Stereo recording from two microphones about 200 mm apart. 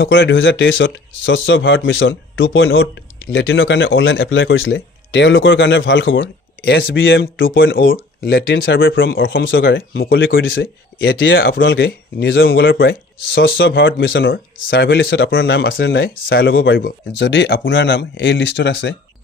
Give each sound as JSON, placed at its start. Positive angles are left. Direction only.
{"t": 0.0, "sound": "speech", "side_deg": 65}
{"t": 7.7, "sound": "speech", "side_deg": 45}
{"t": 8.7, "sound": "speech", "side_deg": 70}
{"t": 9.1, "sound": "speech", "side_deg": 50}
{"t": 10.6, "sound": "speech", "side_deg": 60}
{"t": 15.2, "sound": "speech", "side_deg": 75}
{"t": 15.5, "sound": "speech", "side_deg": 55}